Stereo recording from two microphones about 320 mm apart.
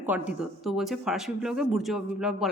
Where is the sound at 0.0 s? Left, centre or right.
Centre.